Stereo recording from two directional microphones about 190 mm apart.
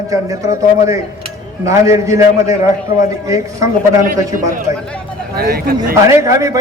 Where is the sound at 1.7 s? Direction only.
15° right (ahead or behind).